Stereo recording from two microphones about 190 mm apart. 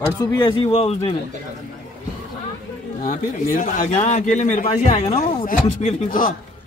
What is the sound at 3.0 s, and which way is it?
Speech, 45° left (ahead or behind).